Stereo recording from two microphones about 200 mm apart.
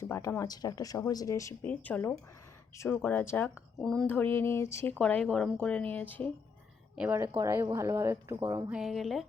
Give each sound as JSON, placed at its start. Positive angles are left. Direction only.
{"t": 0.0, "sound": "speech", "side_deg": 15}
{"t": 6.9, "sound": "speech", "side_deg": -10}
{"t": 8.7, "sound": "speech", "side_deg": 0}